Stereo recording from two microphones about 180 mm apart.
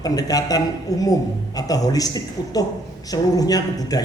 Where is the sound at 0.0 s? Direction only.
20° left (ahead or behind).